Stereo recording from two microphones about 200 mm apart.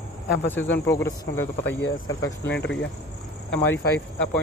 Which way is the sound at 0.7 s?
15° left (ahead or behind).